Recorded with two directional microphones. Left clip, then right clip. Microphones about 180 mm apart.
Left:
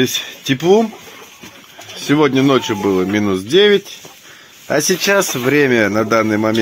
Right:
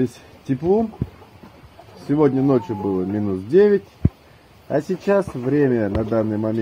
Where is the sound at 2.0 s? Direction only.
50° left (ahead or behind).